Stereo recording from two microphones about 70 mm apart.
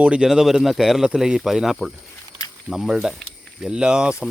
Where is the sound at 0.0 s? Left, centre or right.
Centre.